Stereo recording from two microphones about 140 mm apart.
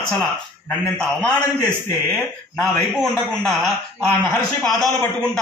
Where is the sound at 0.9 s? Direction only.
10° left (ahead or behind).